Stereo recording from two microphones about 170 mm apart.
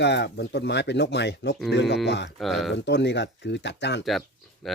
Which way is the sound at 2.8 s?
90° left.